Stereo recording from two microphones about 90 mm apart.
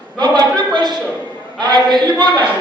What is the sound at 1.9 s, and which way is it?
Speech, 55° right (ahead or behind).